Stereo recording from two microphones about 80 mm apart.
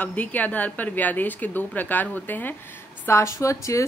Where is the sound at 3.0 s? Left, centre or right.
Left.